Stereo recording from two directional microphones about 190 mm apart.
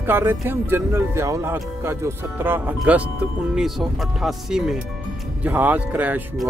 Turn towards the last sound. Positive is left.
turn(degrees=-10)  # may be behind; listen again after turning